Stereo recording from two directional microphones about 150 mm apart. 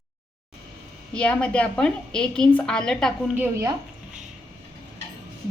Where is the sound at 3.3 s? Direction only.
20° right (ahead or behind).